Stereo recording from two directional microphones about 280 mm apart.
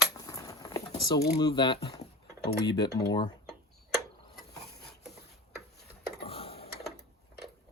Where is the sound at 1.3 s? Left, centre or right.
Centre.